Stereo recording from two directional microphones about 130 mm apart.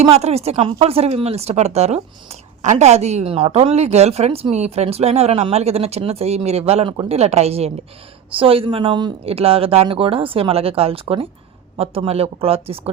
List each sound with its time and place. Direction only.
0.0 s speech: 55° right (ahead or behind); by 9.1 s 35° right (ahead or behind)
9.2 s speech: 50° right (ahead or behind)